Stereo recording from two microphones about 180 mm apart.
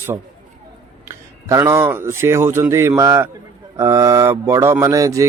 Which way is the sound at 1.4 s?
15° right (ahead or behind).